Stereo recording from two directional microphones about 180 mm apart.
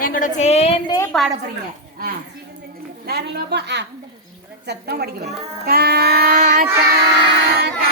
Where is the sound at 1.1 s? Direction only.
5° left (ahead or behind).